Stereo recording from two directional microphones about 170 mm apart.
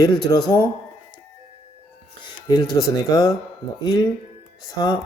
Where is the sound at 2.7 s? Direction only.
20° left (ahead or behind).